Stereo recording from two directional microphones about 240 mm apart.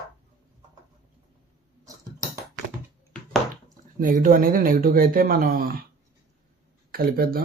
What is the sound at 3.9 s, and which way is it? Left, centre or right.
Speech, right.